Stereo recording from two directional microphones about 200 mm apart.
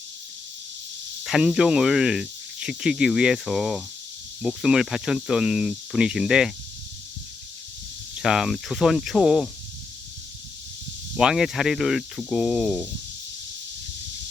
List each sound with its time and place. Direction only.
1.2 s speech: centre (ahead or behind)
8.1 s speech: 5° right (ahead or behind)
11.2 s speech: 5° right (ahead or behind)